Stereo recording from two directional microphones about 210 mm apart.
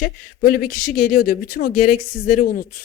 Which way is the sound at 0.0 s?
45° left (ahead or behind).